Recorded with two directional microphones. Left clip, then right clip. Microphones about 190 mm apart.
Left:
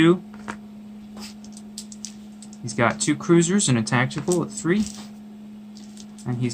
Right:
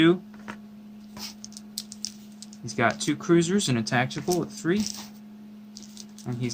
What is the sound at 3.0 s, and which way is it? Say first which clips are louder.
Speech: left 3 dB; 5° right (ahead or behind).